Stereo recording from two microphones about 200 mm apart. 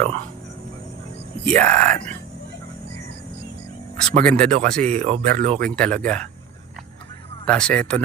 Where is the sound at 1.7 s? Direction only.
35° right (ahead or behind).